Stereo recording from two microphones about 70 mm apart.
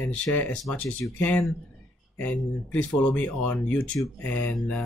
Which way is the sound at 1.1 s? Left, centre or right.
Left.